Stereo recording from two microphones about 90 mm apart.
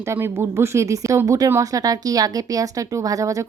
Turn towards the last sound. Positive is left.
turn(degrees=-40)  # may be behind; listen again after turning